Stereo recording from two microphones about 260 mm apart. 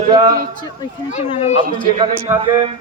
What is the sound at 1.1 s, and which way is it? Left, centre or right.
Speech, left.